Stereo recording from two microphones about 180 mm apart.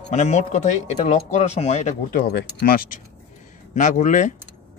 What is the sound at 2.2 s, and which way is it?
Speech, 60° left (ahead or behind).